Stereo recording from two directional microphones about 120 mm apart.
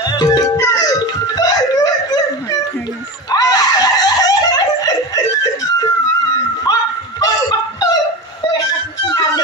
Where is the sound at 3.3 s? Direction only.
30° left (ahead or behind).